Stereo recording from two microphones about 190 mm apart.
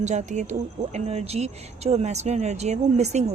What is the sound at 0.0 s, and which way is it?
A woman's voice, 40° right (ahead or behind).